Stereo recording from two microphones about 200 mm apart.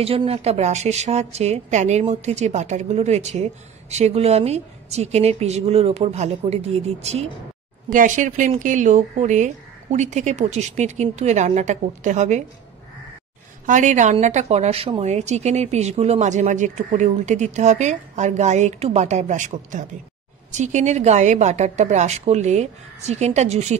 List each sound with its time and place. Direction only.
0.0 s a woman's voice: 30° right (ahead or behind)
13.7 s a woman's voice: 40° right (ahead or behind)